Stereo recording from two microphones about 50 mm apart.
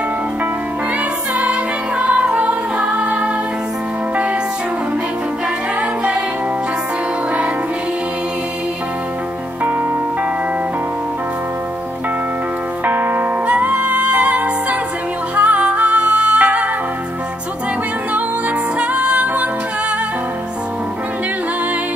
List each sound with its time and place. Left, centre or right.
1.4 s music: right
12.8 s music: right
13.5 s music: right
18.8 s music: right